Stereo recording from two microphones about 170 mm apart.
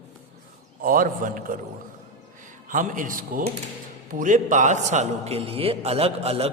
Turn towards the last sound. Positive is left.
turn(degrees=-35)  # may be behind; listen again after turning